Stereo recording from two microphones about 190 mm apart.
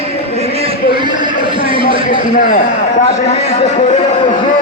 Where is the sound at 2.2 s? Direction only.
45° left (ahead or behind).